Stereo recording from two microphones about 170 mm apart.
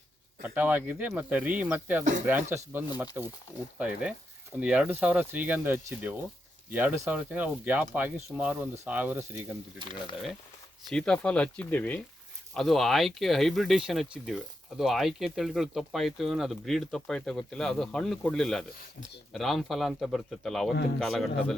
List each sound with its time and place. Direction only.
0.4 s speech: 10° right (ahead or behind)
9.8 s speech: 30° right (ahead or behind)
10.8 s speech: 5° left (ahead or behind)